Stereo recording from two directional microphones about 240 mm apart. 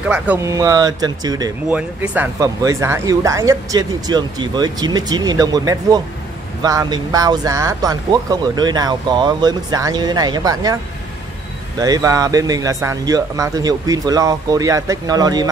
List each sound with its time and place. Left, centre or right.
0.1 s speech: centre
11.8 s speech: centre